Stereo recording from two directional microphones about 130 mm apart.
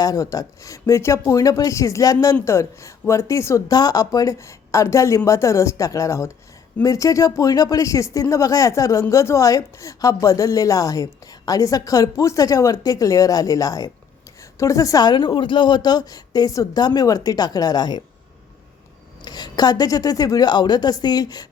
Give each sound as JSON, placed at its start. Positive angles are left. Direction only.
{"t": 0.0, "sound": "a woman's voice", "side_deg": 25}
{"t": 19.2, "sound": "a woman's voice", "side_deg": 30}